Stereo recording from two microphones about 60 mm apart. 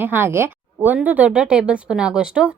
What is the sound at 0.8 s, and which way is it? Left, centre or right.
A woman's voice, right.